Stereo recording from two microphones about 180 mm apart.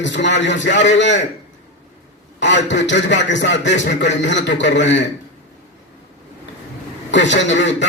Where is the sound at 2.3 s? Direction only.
80° left.